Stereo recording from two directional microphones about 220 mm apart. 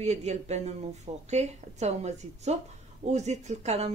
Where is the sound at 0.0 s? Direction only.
30° right (ahead or behind).